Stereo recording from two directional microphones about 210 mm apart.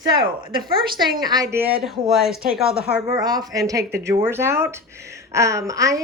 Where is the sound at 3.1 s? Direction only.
20° right (ahead or behind).